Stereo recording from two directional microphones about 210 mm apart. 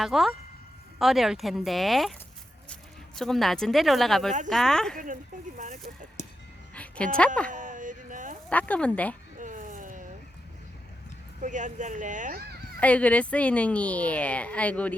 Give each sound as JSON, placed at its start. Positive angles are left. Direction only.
{"t": 0.0, "sound": "speech", "side_deg": 0}
{"t": 3.2, "sound": "speech", "side_deg": 0}
{"t": 5.5, "sound": "speech", "side_deg": -35}
{"t": 6.2, "sound": "music", "side_deg": 35}
{"t": 6.7, "sound": "a sound", "side_deg": 5}
{"t": 7.5, "sound": "a sound", "side_deg": -40}
{"t": 8.4, "sound": "a woman's voice", "side_deg": 5}
{"t": 9.4, "sound": "a sound", "side_deg": -35}
{"t": 11.3, "sound": "speech", "side_deg": -35}
{"t": 12.8, "sound": "a woman's voice", "side_deg": 5}